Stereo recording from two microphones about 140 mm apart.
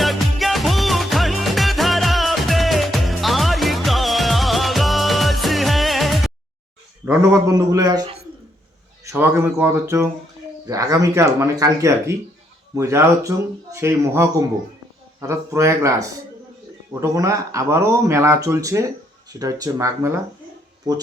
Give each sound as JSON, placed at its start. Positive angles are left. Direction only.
{"t": 0.0, "sound": "music", "side_deg": 0}
{"t": 7.0, "sound": "speech", "side_deg": -15}
{"t": 9.0, "sound": "speech", "side_deg": -15}